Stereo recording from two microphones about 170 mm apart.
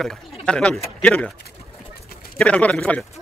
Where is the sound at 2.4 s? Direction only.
5° left (ahead or behind).